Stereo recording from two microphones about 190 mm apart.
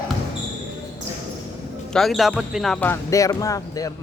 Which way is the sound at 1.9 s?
Centre (ahead or behind).